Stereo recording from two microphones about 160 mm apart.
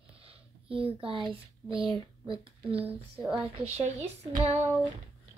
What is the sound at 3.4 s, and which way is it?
A woman's voice, 40° right (ahead or behind).